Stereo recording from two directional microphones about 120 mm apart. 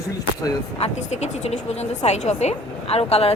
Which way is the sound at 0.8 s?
70° left (ahead or behind).